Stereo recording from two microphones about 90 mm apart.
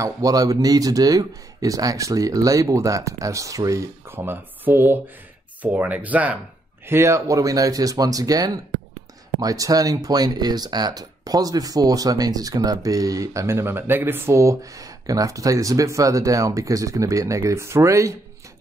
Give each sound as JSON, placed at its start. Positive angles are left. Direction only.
{"t": 0.0, "sound": "speech", "side_deg": -40}
{"t": 4.1, "sound": "speech", "side_deg": -25}
{"t": 6.9, "sound": "speech", "side_deg": -30}